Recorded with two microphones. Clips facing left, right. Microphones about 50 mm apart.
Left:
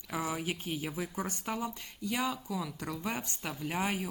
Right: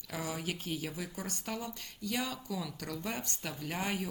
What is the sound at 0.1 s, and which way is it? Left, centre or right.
Speech, centre.